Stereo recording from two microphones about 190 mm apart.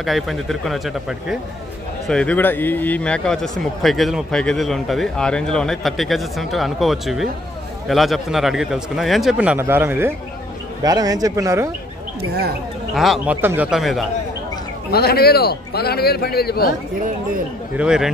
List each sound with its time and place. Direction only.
0.0 s a man's voice: centre (ahead or behind); by 11.7 s 15° right (ahead or behind)
12.9 s a man's voice: centre (ahead or behind)
14.9 s a man's voice: 55° left (ahead or behind)
17.7 s a man's voice: 5° right (ahead or behind)